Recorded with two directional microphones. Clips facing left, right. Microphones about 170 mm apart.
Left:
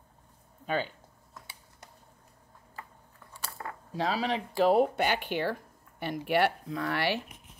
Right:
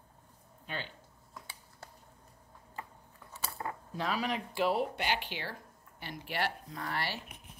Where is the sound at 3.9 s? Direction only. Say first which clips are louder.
Left 5 dB; 90° left.